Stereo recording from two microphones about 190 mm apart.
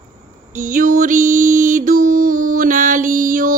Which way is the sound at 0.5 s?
45° right (ahead or behind).